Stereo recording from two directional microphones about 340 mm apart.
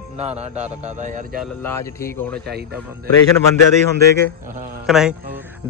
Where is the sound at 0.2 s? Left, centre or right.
Centre.